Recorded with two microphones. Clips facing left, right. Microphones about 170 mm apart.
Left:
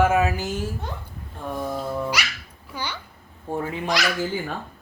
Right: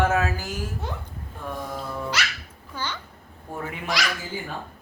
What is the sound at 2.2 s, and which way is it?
Speech, 10° left (ahead or behind).